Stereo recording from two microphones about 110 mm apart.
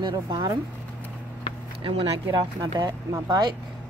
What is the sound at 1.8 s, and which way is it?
Speech, 55° right (ahead or behind).